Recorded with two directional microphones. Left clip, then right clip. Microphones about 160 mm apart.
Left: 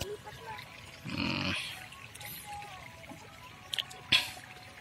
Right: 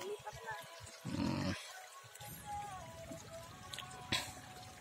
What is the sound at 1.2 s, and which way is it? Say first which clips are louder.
Pig: left 7 dB; 10° right (ahead or behind).